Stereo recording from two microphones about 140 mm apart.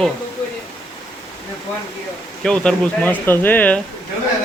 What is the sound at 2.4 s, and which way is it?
Speech, 5° left (ahead or behind).